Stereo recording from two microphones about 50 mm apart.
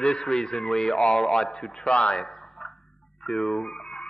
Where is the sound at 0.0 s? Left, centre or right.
Centre.